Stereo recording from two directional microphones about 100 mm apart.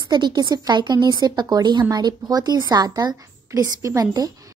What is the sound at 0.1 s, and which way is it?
A woman's voice, 45° right (ahead or behind).